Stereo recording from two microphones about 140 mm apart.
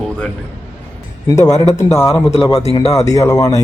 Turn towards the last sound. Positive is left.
turn(degrees=25)  # may be behind; listen again after turning